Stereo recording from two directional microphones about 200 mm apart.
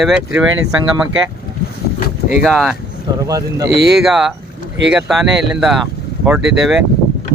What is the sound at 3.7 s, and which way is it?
Speech, centre (ahead or behind).